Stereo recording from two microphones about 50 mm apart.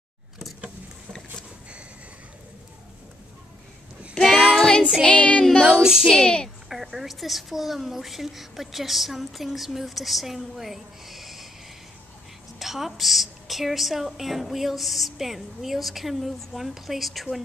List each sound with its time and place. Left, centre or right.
4.6 s child singing: centre
5.4 s child singing: centre
5.7 s child singing: centre
6.0 s a woman's voice: centre
6.7 s a woman's voice: centre
12.5 s a woman's voice: centre